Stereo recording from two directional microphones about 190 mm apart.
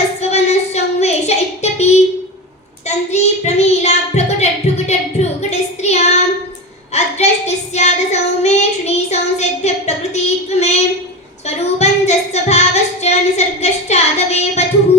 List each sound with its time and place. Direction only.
0.2 s child singing: 35° left (ahead or behind)
2.8 s a sound: 35° left (ahead or behind)
4.9 s child singing: 35° left (ahead or behind)